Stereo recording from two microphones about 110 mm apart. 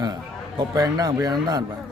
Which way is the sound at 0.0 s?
35° right (ahead or behind).